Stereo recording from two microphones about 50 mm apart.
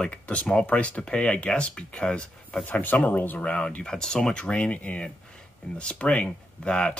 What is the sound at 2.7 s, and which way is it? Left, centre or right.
Speech, left.